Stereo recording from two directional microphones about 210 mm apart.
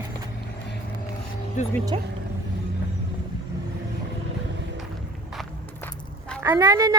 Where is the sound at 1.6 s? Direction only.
35° left (ahead or behind).